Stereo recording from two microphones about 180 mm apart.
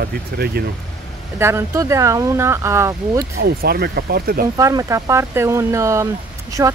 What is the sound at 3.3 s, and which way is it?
Speech, 60° right (ahead or behind).